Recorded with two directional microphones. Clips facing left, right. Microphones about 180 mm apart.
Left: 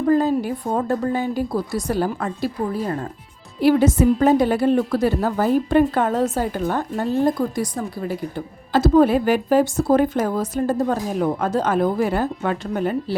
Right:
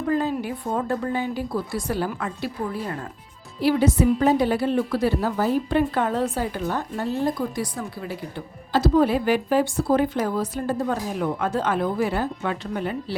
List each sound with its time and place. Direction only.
0.1 s a woman's voice: 40° left (ahead or behind)
3.6 s a woman's voice: 50° left (ahead or behind)